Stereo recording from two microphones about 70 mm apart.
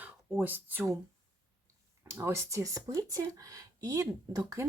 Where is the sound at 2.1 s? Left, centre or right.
Right.